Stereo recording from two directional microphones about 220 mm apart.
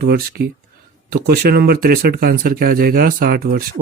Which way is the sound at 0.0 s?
45° right (ahead or behind).